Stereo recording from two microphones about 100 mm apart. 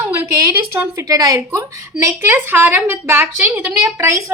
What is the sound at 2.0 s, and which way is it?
A woman's voice, 25° right (ahead or behind).